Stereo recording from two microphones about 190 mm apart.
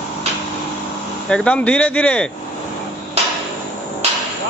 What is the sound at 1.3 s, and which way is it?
Speech, 5° left (ahead or behind).